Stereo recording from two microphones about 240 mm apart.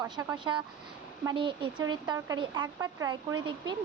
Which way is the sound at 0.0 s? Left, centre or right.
Centre.